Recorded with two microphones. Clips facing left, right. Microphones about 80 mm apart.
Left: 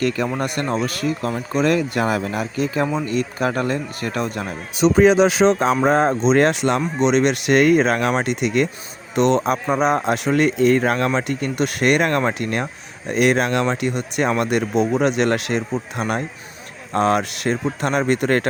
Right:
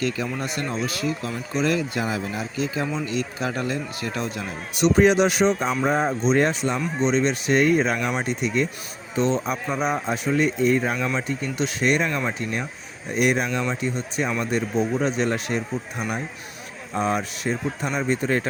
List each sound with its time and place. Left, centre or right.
0.0 s speech: left
5.5 s speech: left
10.9 s speech: left
13.1 s speech: left
17.8 s speech: left